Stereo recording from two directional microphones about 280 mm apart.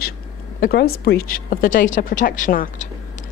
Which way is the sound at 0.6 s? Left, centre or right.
Left.